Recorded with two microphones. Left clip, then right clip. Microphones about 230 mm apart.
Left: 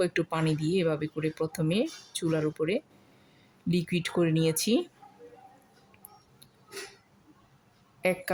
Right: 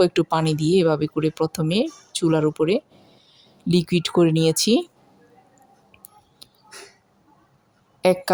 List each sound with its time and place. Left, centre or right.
0.0 s speech: right
8.0 s a woman's voice: right